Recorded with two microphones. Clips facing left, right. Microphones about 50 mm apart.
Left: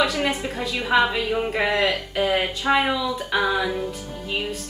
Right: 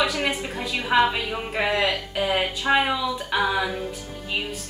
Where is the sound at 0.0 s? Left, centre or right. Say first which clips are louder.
Left 2 dB; centre.